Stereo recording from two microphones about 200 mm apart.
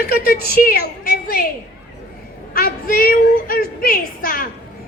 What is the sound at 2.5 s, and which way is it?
A woman's voice, 45° left (ahead or behind).